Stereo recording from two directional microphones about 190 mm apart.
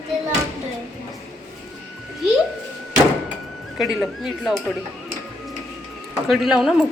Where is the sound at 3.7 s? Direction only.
Centre (ahead or behind).